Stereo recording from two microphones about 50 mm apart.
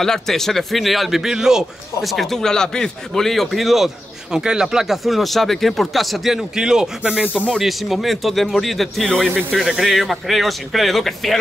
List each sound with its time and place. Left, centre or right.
0.0 s a man's voice: centre
6.5 s speech: centre
7.5 s a man's voice: centre
9.0 s speech: centre
9.6 s speech: centre
9.8 s a man's voice: centre